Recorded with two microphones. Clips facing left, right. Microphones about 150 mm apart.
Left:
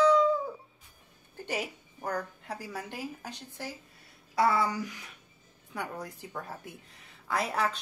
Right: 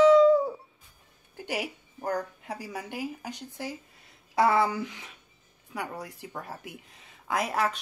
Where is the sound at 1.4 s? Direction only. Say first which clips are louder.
Right 2 dB; 10° right (ahead or behind).